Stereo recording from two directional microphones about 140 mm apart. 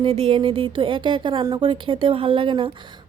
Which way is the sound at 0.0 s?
40° right (ahead or behind).